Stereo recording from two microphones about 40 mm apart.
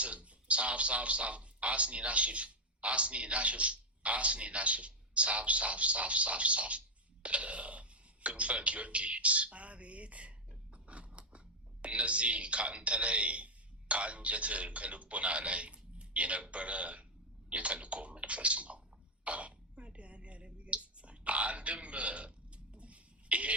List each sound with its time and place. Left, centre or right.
0.0 s a man's voice: right
19.2 s throat clearing: right